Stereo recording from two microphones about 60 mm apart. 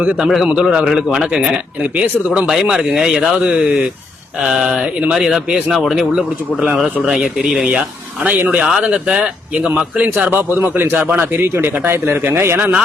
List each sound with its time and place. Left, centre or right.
0.0 s a man's voice: centre
0.3 s a man's voice: centre
5.1 s a man's voice: centre; by 10.9 s right
10.9 s a man's voice: right
11.3 s a man's voice: right